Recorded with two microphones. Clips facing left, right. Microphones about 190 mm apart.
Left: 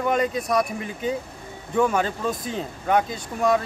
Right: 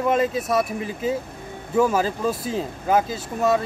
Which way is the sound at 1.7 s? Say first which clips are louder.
Right 2 dB; 5° right (ahead or behind).